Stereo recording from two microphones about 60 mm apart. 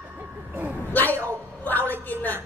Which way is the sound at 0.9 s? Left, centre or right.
Left.